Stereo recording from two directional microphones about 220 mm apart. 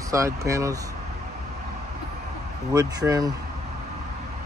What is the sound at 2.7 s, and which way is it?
Speech, 15° right (ahead or behind).